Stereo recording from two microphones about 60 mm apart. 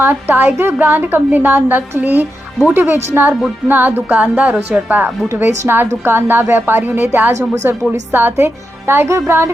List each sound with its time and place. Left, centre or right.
0.0 s a woman's voice: right
3.7 s a woman's voice: right